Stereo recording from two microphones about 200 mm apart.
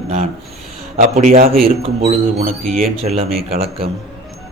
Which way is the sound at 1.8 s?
35° right (ahead or behind).